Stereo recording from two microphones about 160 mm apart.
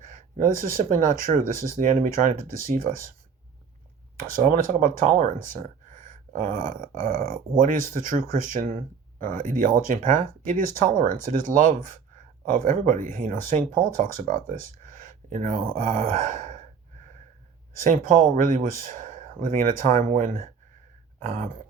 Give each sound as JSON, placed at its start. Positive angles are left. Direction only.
{"t": 0.0, "sound": "speech", "side_deg": -55}
{"t": 4.4, "sound": "speech", "side_deg": -60}
{"t": 17.8, "sound": "speech", "side_deg": -55}